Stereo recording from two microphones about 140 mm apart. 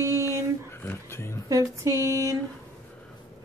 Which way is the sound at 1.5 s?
20° right (ahead or behind).